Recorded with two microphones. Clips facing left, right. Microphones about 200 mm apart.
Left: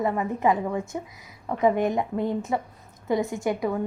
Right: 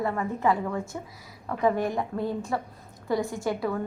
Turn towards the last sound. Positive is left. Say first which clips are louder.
# left 2 dB
turn(degrees=20)  # may be behind; listen again after turning